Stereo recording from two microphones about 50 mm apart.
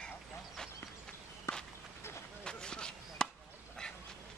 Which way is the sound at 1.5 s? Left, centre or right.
Left.